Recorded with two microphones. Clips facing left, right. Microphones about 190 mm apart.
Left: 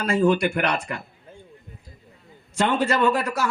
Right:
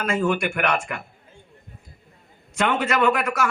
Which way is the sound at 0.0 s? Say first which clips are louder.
Left 3 dB; 40° left (ahead or behind).